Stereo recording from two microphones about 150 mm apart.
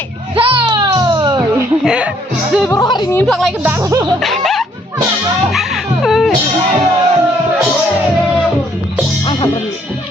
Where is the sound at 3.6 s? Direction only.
20° right (ahead or behind).